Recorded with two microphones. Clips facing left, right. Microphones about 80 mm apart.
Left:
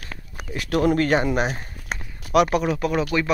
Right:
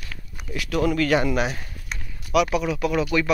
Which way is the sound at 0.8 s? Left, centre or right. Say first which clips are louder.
Left 1 dB; left.